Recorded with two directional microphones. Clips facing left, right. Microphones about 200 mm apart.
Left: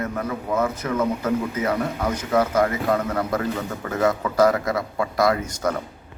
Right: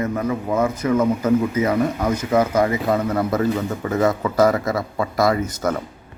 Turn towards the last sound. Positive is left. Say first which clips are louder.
# right 2 dB
turn(degrees=-5)  # may be behind; listen again after turning